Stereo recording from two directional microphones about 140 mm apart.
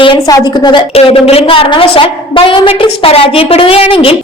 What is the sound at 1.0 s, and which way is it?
A woman's voice, 45° left (ahead or behind).